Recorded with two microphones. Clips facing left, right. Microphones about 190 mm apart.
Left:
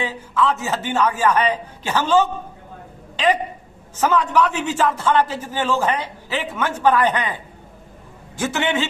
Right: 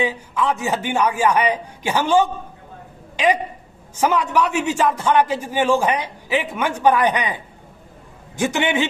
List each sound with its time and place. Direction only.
0.0 s a man's voice: 15° right (ahead or behind)
4.0 s a man's voice: 10° right (ahead or behind)